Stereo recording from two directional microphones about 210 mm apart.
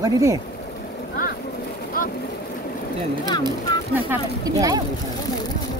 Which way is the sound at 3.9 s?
15° right (ahead or behind).